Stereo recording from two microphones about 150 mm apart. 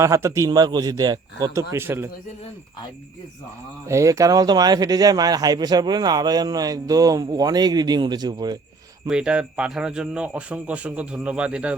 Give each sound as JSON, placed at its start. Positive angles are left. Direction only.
{"t": 0.0, "sound": "speech", "side_deg": -20}
{"t": 3.8, "sound": "speech", "side_deg": -20}
{"t": 9.0, "sound": "a man's voice", "side_deg": -5}